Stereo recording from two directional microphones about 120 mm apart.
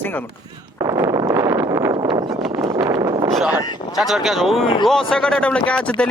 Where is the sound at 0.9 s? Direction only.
25° right (ahead or behind).